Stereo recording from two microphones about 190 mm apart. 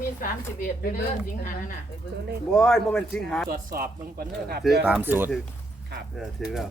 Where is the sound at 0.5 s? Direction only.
45° left (ahead or behind).